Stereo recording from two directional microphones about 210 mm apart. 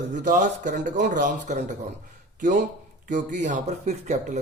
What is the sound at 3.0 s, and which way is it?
Speech, 35° right (ahead or behind).